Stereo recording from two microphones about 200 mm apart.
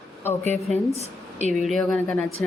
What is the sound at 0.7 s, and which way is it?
Speech, 35° right (ahead or behind).